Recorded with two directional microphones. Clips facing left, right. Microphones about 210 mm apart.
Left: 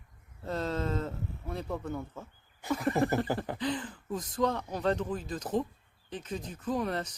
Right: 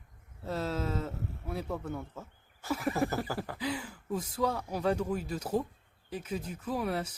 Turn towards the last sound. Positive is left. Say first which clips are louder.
# left 1 dB
turn(degrees=-5)  # may be behind; listen again after turning